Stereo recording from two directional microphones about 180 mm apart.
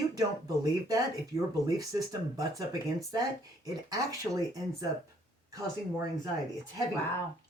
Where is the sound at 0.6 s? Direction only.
20° right (ahead or behind).